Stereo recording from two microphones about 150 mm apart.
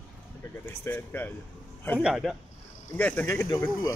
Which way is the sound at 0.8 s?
10° left (ahead or behind).